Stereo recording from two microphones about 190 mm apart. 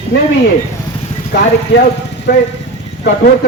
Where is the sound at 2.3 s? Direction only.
60° left (ahead or behind).